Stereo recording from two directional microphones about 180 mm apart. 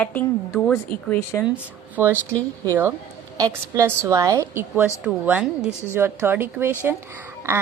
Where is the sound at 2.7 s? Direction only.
10° right (ahead or behind).